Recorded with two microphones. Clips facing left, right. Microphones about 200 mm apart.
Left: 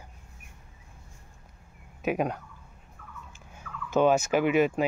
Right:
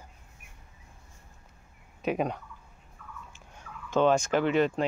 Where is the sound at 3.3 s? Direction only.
5° left (ahead or behind).